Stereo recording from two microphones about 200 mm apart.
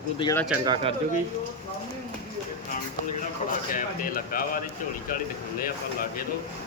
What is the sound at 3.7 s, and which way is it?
Speech, 45° left (ahead or behind).